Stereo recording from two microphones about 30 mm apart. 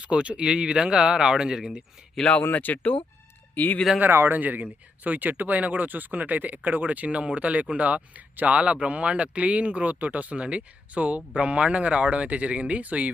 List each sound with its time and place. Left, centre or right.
0.0 s speech: right
2.5 s speech: left
3.5 s speech: left
4.0 s speech: right
4.6 s speech: right
7.2 s speech: right
10.3 s speech: right
10.9 s speech: right